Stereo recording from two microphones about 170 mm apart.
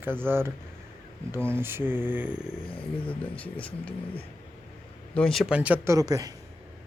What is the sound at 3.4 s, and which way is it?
Speech, 10° left (ahead or behind).